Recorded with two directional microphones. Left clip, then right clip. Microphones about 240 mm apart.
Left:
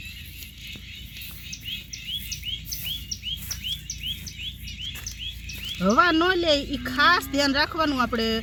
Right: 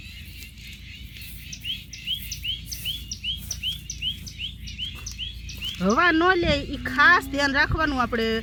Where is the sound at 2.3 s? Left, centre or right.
Right.